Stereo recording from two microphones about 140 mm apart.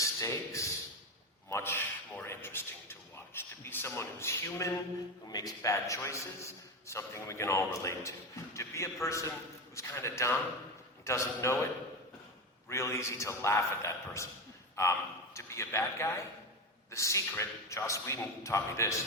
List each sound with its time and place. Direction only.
0.0 s a sound: 20° left (ahead or behind)
5.3 s a man's voice: 25° left (ahead or behind)
12.6 s a man's voice: 20° left (ahead or behind)
15.4 s a man's voice: 20° left (ahead or behind)